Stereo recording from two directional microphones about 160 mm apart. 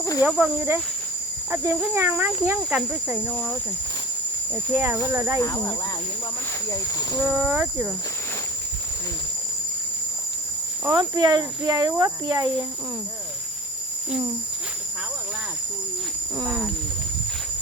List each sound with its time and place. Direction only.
0.2 s speech: 5° right (ahead or behind)
3.3 s speech: 10° left (ahead or behind)
4.7 s speech: 15° right (ahead or behind)
5.4 s speech: 20° left (ahead or behind)
7.3 s speech: 10° right (ahead or behind)
10.8 s speech: 25° right (ahead or behind)
16.5 s a sound: centre (ahead or behind)